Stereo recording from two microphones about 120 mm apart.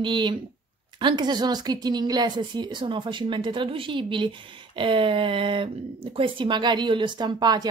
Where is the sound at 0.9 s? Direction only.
40° right (ahead or behind).